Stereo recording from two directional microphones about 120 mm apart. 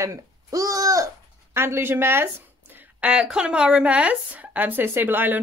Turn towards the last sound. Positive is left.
turn(degrees=-15)  # may be behind; listen again after turning